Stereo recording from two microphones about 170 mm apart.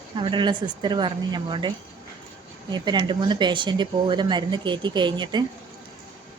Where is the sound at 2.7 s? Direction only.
25° right (ahead or behind).